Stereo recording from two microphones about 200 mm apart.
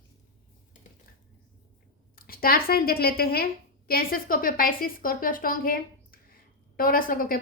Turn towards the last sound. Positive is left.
turn(degrees=45)  # may be behind; listen again after turning